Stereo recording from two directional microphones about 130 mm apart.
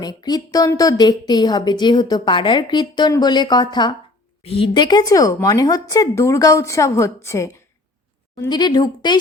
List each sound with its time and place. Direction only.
0.0 s a woman's voice: 30° left (ahead or behind)
8.4 s a woman's voice: 35° left (ahead or behind)